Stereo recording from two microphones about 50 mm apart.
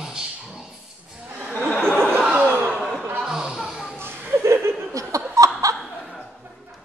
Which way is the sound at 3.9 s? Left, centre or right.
Right.